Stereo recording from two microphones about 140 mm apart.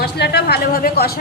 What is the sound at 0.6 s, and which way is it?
Speech, 90° left.